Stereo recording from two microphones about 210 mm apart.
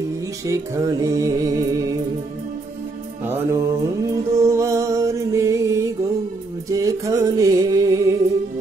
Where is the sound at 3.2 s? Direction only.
10° right (ahead or behind).